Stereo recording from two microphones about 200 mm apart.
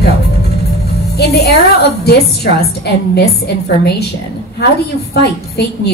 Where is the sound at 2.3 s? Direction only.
55° left (ahead or behind).